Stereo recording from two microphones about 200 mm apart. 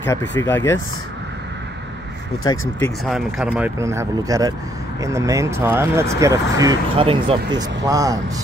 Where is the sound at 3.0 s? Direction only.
5° right (ahead or behind).